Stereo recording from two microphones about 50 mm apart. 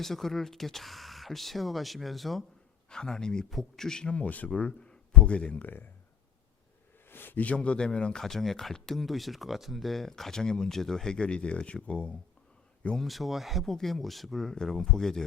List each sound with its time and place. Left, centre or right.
0.0 s speech: centre
2.9 s speech: centre
4.1 s speech: left
7.1 s a sound: left
7.4 s a man's voice: left
8.2 s speech: centre; by 12.1 s left
13.0 s speech: centre
14.5 s speech: centre